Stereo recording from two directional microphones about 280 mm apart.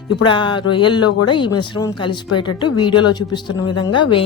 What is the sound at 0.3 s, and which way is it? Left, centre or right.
Speech, centre.